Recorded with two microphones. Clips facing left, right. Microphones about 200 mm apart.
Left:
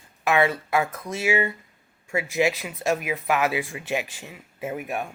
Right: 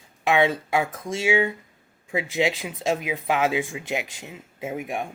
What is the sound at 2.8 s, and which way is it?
Speech, 15° right (ahead or behind).